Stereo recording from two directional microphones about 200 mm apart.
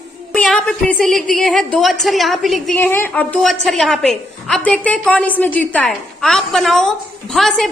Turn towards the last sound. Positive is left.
turn(degrees=0)  # may be behind; listen again after turning